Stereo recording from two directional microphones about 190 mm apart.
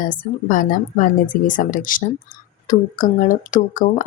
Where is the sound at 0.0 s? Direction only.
45° left (ahead or behind).